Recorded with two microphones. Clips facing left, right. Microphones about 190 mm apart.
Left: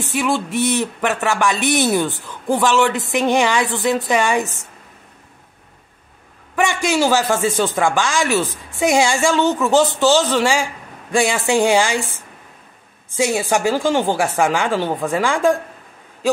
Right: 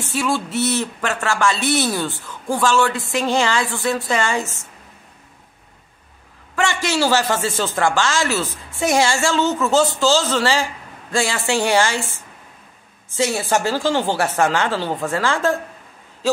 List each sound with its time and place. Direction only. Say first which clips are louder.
0.0 s speech: left 2 dB; 15° left (ahead or behind)
6.5 s speech: left 3 dB; 15° left (ahead or behind)
13.1 s speech: left 2 dB; 15° left (ahead or behind)